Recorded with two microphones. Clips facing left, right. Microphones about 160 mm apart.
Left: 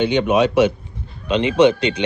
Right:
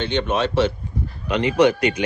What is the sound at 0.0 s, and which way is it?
Speech, 10° left (ahead or behind).